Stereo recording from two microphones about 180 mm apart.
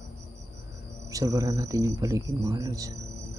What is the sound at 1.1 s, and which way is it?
Speech, 20° right (ahead or behind).